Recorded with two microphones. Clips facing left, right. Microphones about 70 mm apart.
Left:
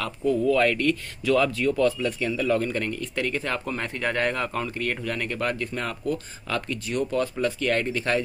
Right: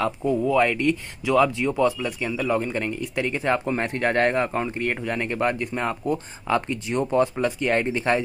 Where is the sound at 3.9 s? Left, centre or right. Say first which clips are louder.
Right 5 dB; right.